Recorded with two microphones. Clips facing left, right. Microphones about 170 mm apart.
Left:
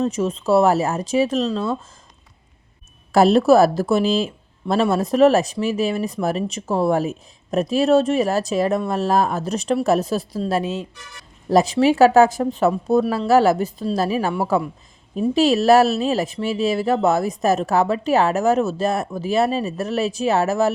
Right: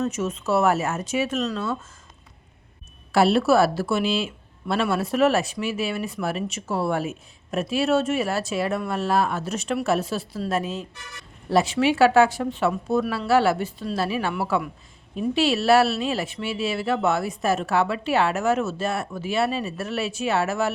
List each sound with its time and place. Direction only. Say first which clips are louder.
0.0 s speech: left 5 dB; 35° left (ahead or behind)
3.1 s speech: left 5 dB; 40° left (ahead or behind)
10.4 s a woman's voice: left 2 dB; 30° left (ahead or behind)
11.4 s speech: left 5 dB; 40° left (ahead or behind)